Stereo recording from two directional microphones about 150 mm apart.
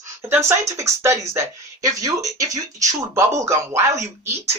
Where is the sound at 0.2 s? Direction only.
15° right (ahead or behind).